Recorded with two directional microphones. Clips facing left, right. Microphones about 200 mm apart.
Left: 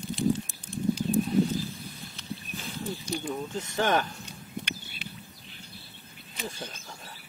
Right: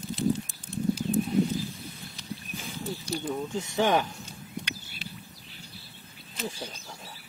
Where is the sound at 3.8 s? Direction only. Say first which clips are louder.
Right 2 dB; 15° right (ahead or behind).